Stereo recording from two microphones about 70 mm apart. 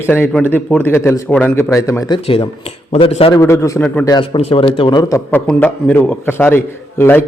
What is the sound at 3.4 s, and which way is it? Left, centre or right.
Speech, left.